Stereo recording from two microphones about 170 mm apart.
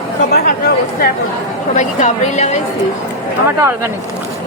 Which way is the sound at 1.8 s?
45° left (ahead or behind).